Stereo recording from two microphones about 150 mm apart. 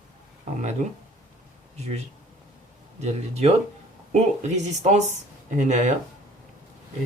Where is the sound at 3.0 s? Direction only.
45° right (ahead or behind).